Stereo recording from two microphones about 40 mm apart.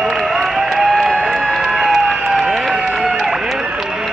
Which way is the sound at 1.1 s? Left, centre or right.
Centre.